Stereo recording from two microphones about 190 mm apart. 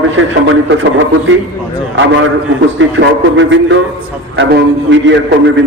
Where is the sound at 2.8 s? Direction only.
75° right (ahead or behind).